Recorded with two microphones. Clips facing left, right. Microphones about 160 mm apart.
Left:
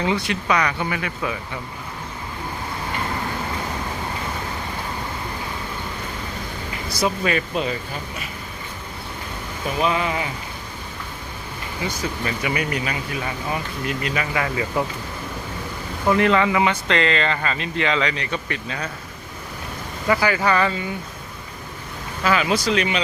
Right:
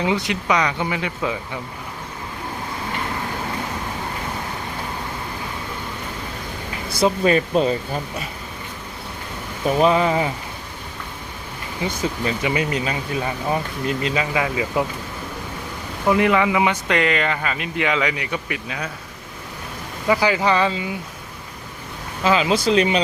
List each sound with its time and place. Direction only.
0.0 s speech: 15° right (ahead or behind)
7.0 s speech: 35° right (ahead or behind)
9.7 s speech: 35° right (ahead or behind)
12.2 s speech: 25° right (ahead or behind)
16.0 s speech: 15° right (ahead or behind)
20.1 s speech: 15° right (ahead or behind)
22.2 s speech: 25° right (ahead or behind)